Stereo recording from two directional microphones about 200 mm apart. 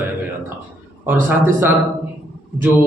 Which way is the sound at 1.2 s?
10° right (ahead or behind).